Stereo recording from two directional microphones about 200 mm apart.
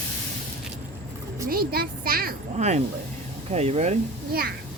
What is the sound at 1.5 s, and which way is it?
A child's voice, 50° right (ahead or behind).